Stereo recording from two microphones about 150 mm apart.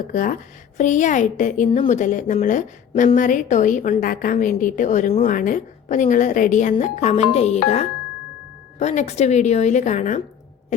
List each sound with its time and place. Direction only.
0.1 s a woman's voice: 60° left (ahead or behind)